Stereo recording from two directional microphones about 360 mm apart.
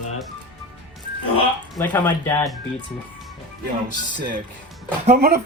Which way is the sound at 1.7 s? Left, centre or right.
Centre.